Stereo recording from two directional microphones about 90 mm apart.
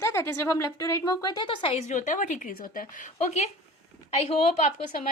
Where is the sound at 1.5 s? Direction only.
80° left.